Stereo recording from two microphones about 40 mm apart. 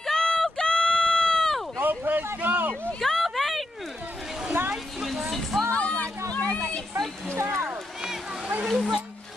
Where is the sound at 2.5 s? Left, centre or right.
Right.